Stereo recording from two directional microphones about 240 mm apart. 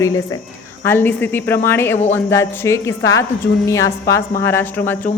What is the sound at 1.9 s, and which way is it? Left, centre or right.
Speech, left.